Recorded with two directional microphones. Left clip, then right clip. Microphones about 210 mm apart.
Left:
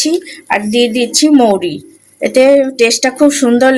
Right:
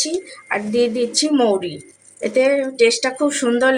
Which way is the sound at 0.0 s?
25° left (ahead or behind).